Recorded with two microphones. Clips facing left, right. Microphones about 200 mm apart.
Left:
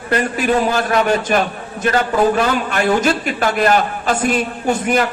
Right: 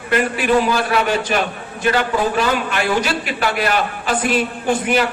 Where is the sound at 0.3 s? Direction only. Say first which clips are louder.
Even; 45° left (ahead or behind).